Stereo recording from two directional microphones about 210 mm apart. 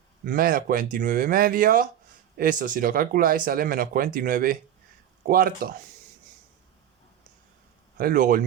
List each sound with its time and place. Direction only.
0.3 s speech: 40° right (ahead or behind)
7.9 s speech: 40° right (ahead or behind)